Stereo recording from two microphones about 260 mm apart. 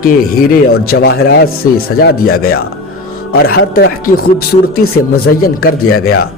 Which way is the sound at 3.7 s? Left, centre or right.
Left.